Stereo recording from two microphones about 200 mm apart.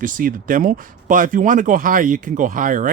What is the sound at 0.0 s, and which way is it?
Speech, 45° right (ahead or behind).